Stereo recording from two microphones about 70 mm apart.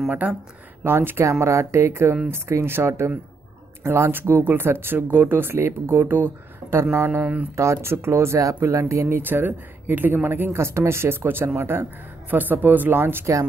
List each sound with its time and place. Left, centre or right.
0.8 s speech: right
4.1 s speech: right
7.1 s speech: centre
7.5 s speech: right
9.2 s speech: right